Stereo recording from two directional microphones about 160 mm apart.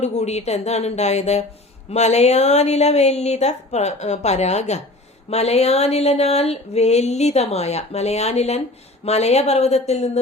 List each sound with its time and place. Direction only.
0.0 s a woman's voice: 45° left (ahead or behind)
5.3 s a sound: 40° left (ahead or behind)
9.0 s a woman's voice: 45° left (ahead or behind)